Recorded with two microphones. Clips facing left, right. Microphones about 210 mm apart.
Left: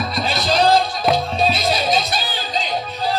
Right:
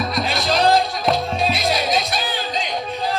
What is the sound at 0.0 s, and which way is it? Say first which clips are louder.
Music: even; centre (ahead or behind).